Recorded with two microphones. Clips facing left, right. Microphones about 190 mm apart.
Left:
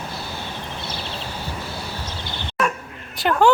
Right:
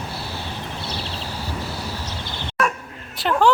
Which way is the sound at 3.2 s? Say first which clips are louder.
Left 1 dB; centre (ahead or behind).